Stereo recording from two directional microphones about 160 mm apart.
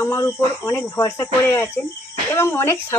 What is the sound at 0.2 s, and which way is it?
Speech, 15° left (ahead or behind).